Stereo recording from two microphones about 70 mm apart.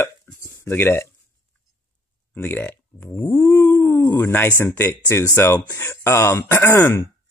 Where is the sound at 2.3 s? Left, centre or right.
Left.